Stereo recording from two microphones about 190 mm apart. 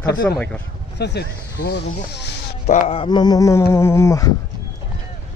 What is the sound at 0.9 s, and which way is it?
Speech, 60° left (ahead or behind).